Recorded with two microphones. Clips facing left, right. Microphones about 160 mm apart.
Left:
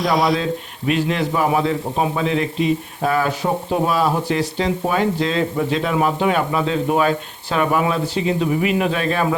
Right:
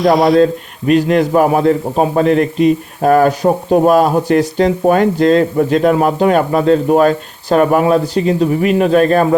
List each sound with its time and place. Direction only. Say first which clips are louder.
0.0 s speech: right 7 dB; centre (ahead or behind)
0.9 s a man's voice: right 8 dB; 45° right (ahead or behind)